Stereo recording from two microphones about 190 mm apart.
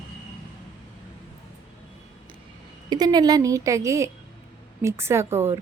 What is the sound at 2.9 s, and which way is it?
A woman's voice, 20° right (ahead or behind).